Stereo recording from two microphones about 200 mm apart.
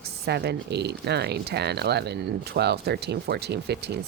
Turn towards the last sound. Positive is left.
turn(degrees=-55)  # may be behind; listen again after turning